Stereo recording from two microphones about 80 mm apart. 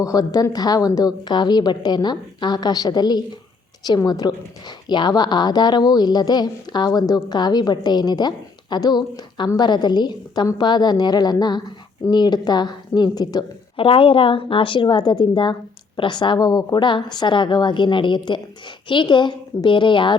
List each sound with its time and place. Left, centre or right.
0.0 s a woman's voice: left
4.9 s a woman's voice: left
14.3 s a woman's voice: left
16.0 s a woman's voice: left